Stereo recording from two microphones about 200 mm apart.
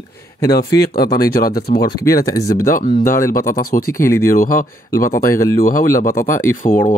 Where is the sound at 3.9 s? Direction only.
15° left (ahead or behind).